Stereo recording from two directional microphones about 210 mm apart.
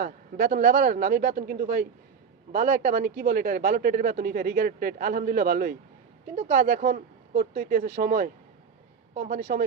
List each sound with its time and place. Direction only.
0.0 s speech: 40° right (ahead or behind)